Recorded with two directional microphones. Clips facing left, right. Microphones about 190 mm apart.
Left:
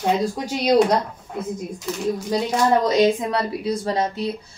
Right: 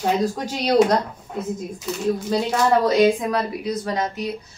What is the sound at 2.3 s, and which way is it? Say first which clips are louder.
A woman's voice: left 1 dB; 15° left (ahead or behind).